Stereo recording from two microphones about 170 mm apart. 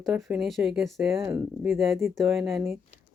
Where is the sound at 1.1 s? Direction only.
15° right (ahead or behind).